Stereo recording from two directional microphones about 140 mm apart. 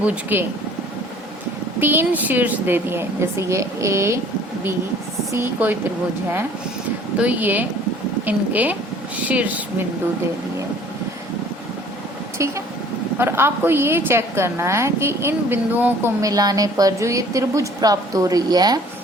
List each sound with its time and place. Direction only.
0.0 s a woman's voice: 10° right (ahead or behind)
1.8 s a woman's voice: 15° right (ahead or behind)
5.3 s a woman's voice: 15° right (ahead or behind)
7.2 s a woman's voice: 10° right (ahead or behind)
12.4 s a woman's voice: 20° right (ahead or behind)
16.2 s a woman's voice: 25° right (ahead or behind)